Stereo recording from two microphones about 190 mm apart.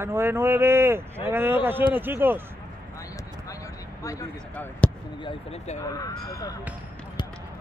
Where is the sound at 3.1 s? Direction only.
15° left (ahead or behind).